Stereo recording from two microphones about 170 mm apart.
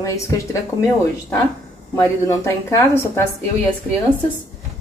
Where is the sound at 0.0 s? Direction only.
20° left (ahead or behind).